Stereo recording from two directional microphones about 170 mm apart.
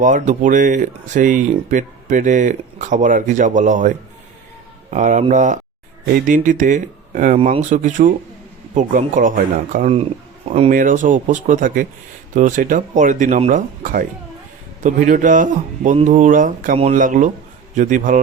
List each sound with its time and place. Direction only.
0.0 s speech: 50° right (ahead or behind)